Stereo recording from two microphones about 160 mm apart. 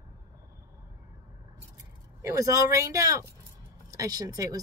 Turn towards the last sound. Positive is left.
turn(degrees=-20)  # may be behind; listen again after turning